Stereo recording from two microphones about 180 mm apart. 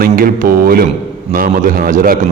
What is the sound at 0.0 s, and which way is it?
A man's voice, 55° right (ahead or behind).